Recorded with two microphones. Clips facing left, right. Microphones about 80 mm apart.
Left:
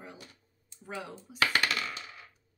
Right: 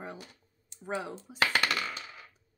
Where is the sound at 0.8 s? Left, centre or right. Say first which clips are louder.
Right 5 dB; right.